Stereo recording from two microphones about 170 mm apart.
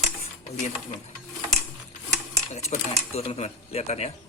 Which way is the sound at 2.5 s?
40° left (ahead or behind).